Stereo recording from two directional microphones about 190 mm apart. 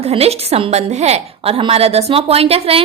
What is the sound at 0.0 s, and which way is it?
A woman's voice, 30° right (ahead or behind).